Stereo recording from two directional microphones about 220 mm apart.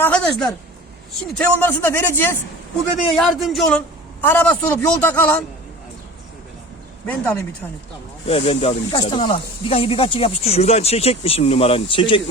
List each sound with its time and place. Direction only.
0.0 s a woman's voice: 5° left (ahead or behind)
7.1 s a man's voice: 5° left (ahead or behind)
8.3 s speech: 30° left (ahead or behind)